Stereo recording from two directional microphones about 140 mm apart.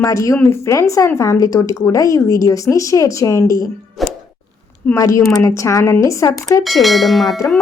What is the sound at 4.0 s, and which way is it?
Plop, centre (ahead or behind).